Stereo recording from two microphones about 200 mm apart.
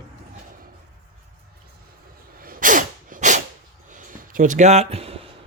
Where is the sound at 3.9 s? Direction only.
40° right (ahead or behind).